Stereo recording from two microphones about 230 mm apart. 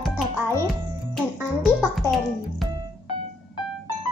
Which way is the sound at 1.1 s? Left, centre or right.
Centre.